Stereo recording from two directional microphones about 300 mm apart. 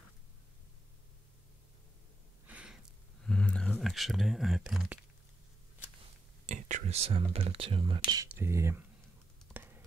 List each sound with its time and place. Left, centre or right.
2.4 s gasp: centre
3.3 s speech: centre
6.4 s speech: right; by 8.8 s centre
9.5 s computer keyboard: centre